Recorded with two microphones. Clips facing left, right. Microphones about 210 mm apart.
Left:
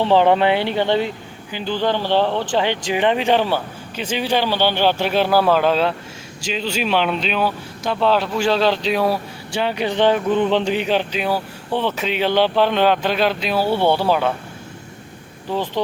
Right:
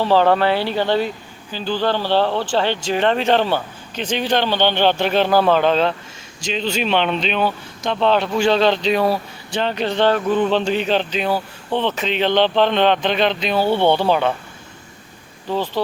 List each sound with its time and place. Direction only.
0.0 s speech: 20° left (ahead or behind)
15.4 s speech: 15° left (ahead or behind)